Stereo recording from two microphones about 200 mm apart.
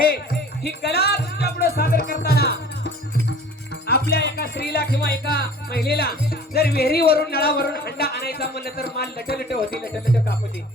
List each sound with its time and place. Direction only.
0.6 s music: 55° left (ahead or behind)
4.1 s speech: 50° left (ahead or behind)